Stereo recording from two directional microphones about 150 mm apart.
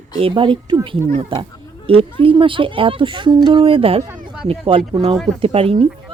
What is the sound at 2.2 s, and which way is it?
Speech, 35° right (ahead or behind).